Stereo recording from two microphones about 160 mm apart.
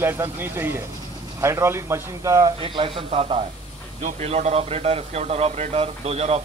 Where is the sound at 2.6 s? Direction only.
35° right (ahead or behind).